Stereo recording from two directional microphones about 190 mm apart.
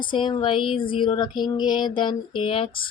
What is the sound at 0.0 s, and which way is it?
Speech, 25° left (ahead or behind).